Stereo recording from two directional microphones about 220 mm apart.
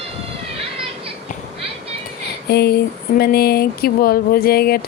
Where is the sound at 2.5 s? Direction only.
45° left (ahead or behind).